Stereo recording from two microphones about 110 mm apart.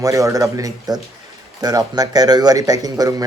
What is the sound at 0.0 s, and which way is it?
A man's voice, 30° right (ahead or behind).